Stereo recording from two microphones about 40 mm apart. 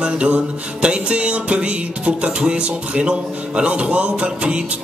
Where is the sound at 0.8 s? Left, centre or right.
Right.